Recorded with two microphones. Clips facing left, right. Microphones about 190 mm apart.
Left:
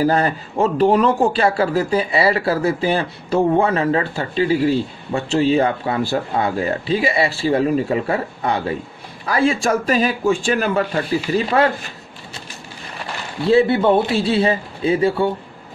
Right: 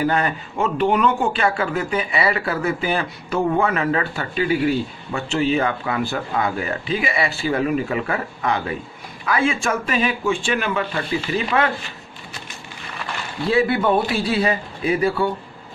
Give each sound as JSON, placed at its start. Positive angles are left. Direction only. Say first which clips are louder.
{"t": 0.0, "sound": "speech", "louder": "left 3 dB", "side_deg": 35}
{"t": 13.5, "sound": "a man's voice", "louder": "left 4 dB", "side_deg": 25}